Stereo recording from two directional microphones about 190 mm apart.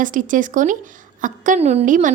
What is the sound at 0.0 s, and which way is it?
A woman's voice, 45° right (ahead or behind).